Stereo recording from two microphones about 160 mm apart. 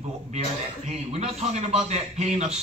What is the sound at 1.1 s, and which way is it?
A man's voice, 40° right (ahead or behind).